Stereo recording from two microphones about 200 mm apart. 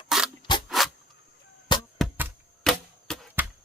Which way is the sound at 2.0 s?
Centre (ahead or behind).